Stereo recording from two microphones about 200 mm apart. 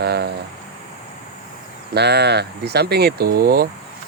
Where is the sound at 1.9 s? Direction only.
55° right (ahead or behind).